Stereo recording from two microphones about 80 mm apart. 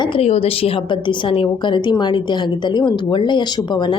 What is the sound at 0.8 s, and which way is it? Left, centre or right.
A woman's voice, left.